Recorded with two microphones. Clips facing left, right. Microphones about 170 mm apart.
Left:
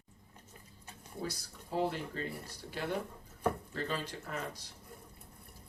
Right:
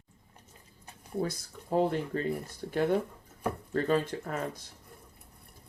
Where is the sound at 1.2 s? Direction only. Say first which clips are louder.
Right 6 dB; 50° right (ahead or behind).